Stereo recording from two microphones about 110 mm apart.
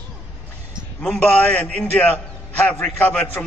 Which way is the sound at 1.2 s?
15° left (ahead or behind).